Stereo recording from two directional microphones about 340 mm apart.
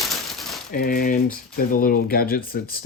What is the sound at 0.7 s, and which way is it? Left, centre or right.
Speech, left.